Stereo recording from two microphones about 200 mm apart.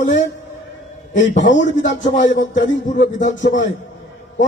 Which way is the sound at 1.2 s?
40° left (ahead or behind).